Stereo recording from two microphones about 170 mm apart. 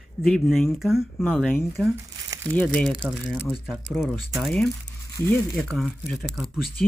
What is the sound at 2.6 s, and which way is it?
Speech, 5° left (ahead or behind).